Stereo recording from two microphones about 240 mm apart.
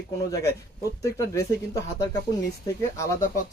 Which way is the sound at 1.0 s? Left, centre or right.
Centre.